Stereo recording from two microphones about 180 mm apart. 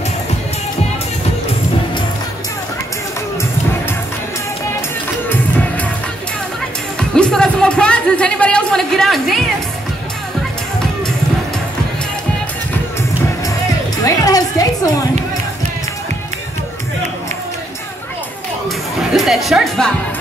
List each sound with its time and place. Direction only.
7.0 s music: 5° left (ahead or behind)
14.0 s music: 20° left (ahead or behind)
18.9 s speech: centre (ahead or behind)